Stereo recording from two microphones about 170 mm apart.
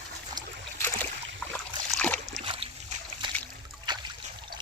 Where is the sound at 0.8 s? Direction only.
15° left (ahead or behind).